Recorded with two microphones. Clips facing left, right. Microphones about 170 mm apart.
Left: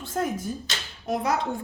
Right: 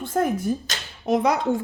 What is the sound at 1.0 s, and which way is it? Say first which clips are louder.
Speech: right 7 dB; 90° right.